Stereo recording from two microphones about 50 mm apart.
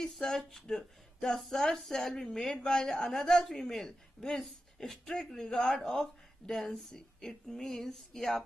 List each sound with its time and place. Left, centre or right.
0.0 s a woman's voice: centre